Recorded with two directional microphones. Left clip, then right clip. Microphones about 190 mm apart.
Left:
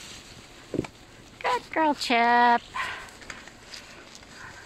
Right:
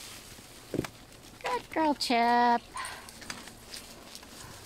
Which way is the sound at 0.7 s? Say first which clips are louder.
Left 3 dB; 20° left (ahead or behind).